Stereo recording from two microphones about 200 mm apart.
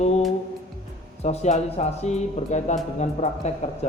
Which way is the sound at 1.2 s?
35° left (ahead or behind).